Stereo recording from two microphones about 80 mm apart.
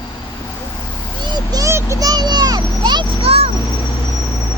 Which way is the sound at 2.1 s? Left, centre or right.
Right.